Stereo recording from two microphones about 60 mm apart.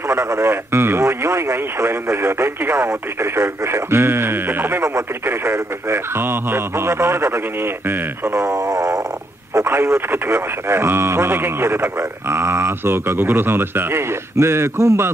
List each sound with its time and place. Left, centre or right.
0.1 s speech: right
9.7 s speech: right
14.3 s speech: right